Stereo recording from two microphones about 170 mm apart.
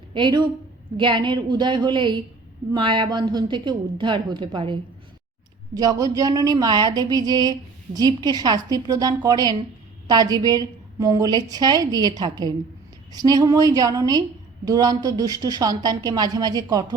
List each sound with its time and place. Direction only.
0.1 s a woman's voice: 30° right (ahead or behind)